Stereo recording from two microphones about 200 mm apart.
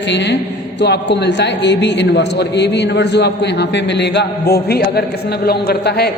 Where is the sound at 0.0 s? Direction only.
60° left (ahead or behind).